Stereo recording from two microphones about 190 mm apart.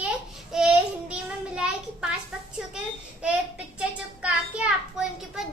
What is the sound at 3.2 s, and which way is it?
A woman's voice, 5° right (ahead or behind).